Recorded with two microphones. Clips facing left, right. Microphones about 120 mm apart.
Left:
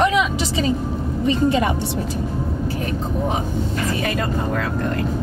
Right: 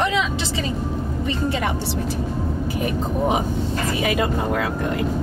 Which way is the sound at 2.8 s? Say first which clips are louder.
Right 4 dB; 10° right (ahead or behind).